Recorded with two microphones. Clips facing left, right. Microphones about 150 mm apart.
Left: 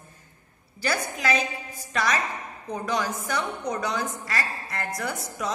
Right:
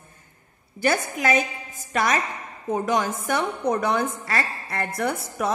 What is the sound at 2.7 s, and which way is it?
A woman's voice, 50° right (ahead or behind).